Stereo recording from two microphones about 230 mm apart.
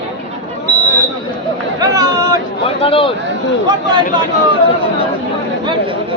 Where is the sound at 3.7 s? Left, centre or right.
Centre.